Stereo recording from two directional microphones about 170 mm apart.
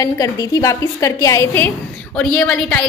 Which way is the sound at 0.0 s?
20° left (ahead or behind).